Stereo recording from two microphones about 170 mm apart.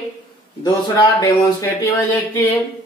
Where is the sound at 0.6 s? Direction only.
25° left (ahead or behind).